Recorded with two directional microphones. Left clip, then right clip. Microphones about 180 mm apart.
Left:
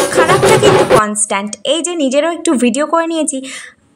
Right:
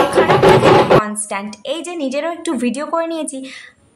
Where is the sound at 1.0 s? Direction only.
35° left (ahead or behind).